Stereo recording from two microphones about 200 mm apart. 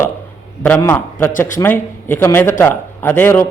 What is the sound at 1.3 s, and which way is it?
Speech, 40° left (ahead or behind).